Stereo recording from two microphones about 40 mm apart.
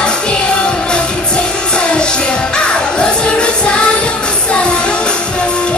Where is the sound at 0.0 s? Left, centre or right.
Left.